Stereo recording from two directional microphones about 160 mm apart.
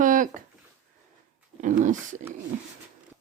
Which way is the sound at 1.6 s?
50° right (ahead or behind).